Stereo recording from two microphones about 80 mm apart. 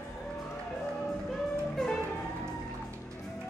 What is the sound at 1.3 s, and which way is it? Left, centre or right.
Music, centre.